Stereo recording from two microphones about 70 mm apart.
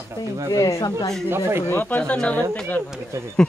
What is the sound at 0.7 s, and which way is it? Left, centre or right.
Speech, left.